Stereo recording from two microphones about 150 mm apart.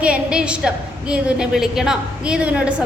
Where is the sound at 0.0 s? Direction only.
5° right (ahead or behind).